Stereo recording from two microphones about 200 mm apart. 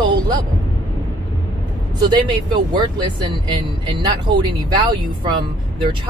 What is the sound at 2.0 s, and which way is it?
Speech, 25° right (ahead or behind).